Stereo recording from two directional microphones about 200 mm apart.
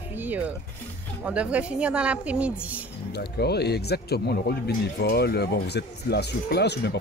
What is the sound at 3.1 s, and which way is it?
Speech, 55° left (ahead or behind).